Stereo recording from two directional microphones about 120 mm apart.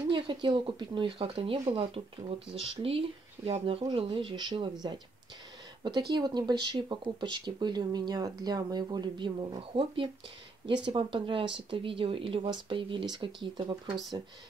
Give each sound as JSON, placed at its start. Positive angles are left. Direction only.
{"t": 0.1, "sound": "speech", "side_deg": -40}
{"t": 5.9, "sound": "speech", "side_deg": -40}